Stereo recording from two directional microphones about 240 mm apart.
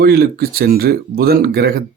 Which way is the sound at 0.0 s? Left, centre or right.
Right.